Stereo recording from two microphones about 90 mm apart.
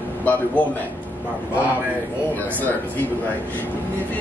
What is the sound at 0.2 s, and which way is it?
Music, 20° left (ahead or behind).